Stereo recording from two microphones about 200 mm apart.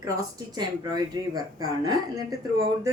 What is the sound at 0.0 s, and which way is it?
Speech, 20° right (ahead or behind).